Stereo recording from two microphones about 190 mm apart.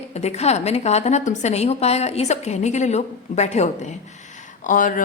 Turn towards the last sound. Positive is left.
turn(degrees=45)  # may be behind; listen again after turning